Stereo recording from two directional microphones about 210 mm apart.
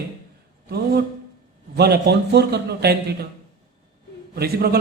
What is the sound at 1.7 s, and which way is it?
A man's voice, 50° right (ahead or behind).